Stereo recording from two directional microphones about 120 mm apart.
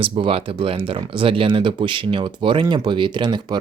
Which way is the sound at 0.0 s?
50° right (ahead or behind).